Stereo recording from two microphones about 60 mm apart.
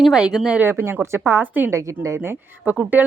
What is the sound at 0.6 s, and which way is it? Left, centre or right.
A woman's voice, right.